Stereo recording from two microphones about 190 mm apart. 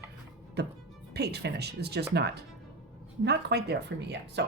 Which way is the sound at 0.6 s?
60° right (ahead or behind).